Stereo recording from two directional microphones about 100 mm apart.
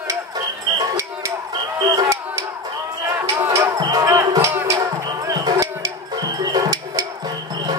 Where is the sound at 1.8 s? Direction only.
35° right (ahead or behind).